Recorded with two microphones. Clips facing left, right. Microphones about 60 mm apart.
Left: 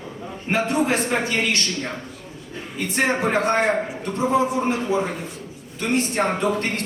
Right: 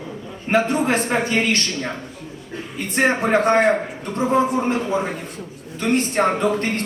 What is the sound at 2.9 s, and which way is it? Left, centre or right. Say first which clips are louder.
A man's voice: right 3 dB; right.